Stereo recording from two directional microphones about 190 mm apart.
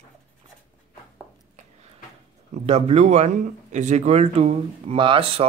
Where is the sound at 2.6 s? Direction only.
35° right (ahead or behind).